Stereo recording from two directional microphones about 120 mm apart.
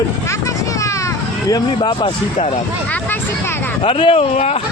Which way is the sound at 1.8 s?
45° left (ahead or behind).